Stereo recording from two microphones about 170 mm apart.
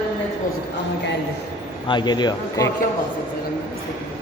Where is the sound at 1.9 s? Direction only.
25° left (ahead or behind).